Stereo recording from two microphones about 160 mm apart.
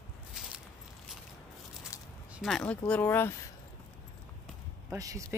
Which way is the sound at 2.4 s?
5° left (ahead or behind).